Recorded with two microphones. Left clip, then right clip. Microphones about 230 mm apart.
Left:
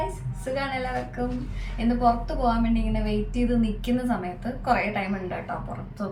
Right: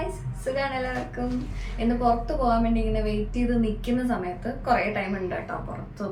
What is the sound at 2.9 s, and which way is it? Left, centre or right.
A woman's voice, centre.